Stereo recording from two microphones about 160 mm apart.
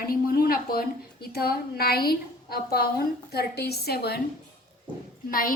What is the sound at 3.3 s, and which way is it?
Speech, 90° left.